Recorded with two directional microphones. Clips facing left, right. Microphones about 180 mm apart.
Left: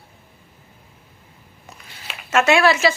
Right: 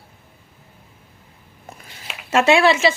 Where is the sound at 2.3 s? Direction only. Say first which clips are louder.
Right 1 dB; 30° right (ahead or behind).